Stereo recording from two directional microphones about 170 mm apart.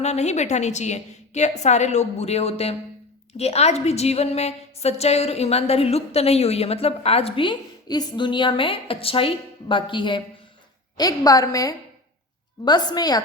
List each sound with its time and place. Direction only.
0.0 s a woman's voice: 40° left (ahead or behind); by 13.2 s 25° left (ahead or behind)